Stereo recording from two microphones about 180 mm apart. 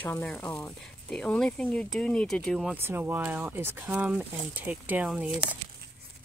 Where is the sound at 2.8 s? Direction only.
10° right (ahead or behind).